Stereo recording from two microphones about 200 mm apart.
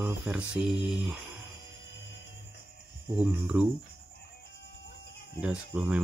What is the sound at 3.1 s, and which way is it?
Speech, 5° right (ahead or behind).